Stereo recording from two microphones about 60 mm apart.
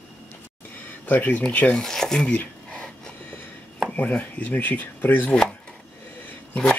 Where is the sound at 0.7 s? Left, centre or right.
Left.